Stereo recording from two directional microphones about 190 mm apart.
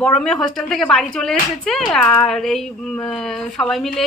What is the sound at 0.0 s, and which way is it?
Speech, 5° left (ahead or behind).